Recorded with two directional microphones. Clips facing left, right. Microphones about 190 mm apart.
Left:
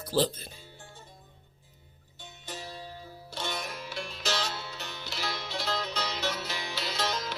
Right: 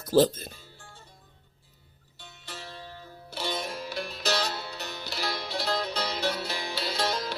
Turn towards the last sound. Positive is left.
turn(degrees=-35)  # may be behind; listen again after turning